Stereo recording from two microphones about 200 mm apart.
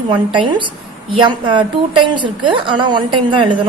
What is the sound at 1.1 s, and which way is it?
A woman's voice, 25° right (ahead or behind).